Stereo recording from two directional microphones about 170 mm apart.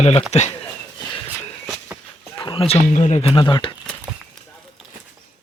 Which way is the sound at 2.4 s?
30° left (ahead or behind).